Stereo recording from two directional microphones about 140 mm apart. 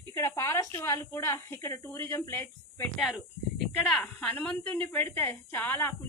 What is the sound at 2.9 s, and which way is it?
Speech, centre (ahead or behind).